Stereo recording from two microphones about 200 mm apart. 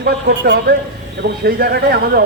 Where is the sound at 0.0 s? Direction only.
55° right (ahead or behind).